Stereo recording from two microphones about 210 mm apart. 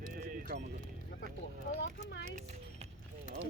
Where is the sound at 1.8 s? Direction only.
60° left (ahead or behind).